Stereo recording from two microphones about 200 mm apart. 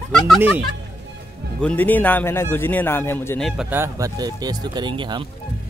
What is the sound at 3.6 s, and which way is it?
Speech, 10° right (ahead or behind).